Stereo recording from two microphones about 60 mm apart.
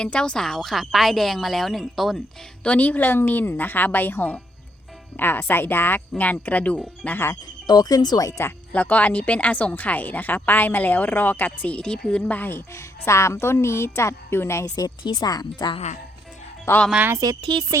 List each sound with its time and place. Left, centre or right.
0.0 s a woman's voice: centre
2.6 s a woman's voice: left
7.8 s speech: left
8.7 s a woman's voice: left
12.2 s a woman's voice: left
14.6 s speech: left
16.7 s a woman's voice: left
17.2 s speech: right